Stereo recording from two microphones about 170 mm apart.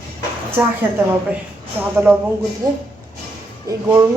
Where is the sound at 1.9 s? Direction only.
10° right (ahead or behind).